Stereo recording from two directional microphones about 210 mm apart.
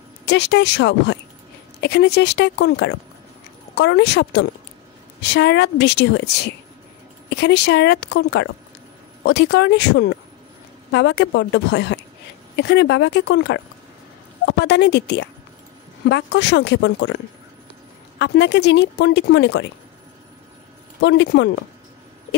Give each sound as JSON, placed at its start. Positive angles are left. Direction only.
{"t": 0.2, "sound": "a woman's voice", "side_deg": 55}
{"t": 18.2, "sound": "a woman's voice", "side_deg": 55}
{"t": 21.0, "sound": "a woman's voice", "side_deg": 55}